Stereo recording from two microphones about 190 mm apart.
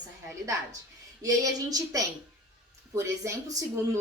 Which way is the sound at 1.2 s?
20° right (ahead or behind).